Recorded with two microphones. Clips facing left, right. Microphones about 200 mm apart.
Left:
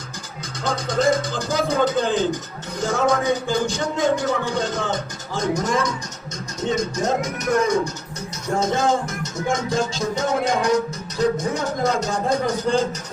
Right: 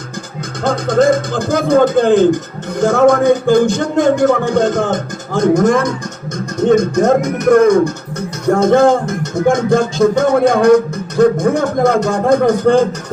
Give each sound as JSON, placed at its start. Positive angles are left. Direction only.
{"t": 0.6, "sound": "music", "side_deg": -55}
{"t": 2.8, "sound": "a man's voice", "side_deg": -55}
{"t": 6.6, "sound": "music", "side_deg": -55}